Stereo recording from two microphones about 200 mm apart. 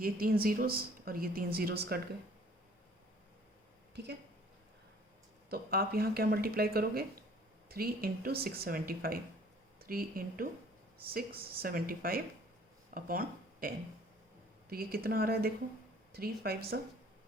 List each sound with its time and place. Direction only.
0.0 s speech: 45° right (ahead or behind)
5.5 s speech: 50° right (ahead or behind)